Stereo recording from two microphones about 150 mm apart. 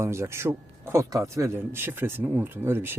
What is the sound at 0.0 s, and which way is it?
Speech, 20° right (ahead or behind).